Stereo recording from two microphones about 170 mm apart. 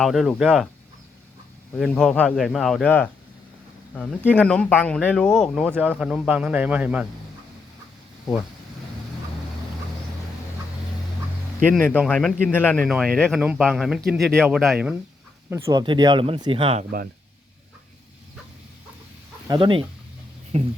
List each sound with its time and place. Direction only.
0.0 s speech: centre (ahead or behind)
1.8 s speech: 5° left (ahead or behind)
3.9 s speech: 10° left (ahead or behind)
5.7 s a man's voice: 10° right (ahead or behind)
11.7 s a man's voice: 5° left (ahead or behind)
12.8 s speech: 5° right (ahead or behind)
15.4 s a man's voice: 15° right (ahead or behind); by 16.8 s 30° right (ahead or behind)
19.5 s speech: 30° right (ahead or behind)